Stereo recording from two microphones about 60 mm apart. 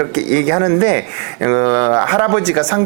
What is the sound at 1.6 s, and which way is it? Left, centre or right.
Speech, right.